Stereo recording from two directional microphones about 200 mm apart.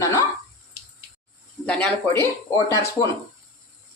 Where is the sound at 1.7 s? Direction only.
5° left (ahead or behind).